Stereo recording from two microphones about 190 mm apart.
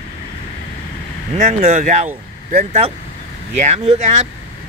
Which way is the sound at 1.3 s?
40° right (ahead or behind).